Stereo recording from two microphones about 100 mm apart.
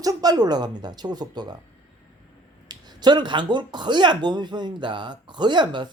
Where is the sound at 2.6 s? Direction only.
45° right (ahead or behind).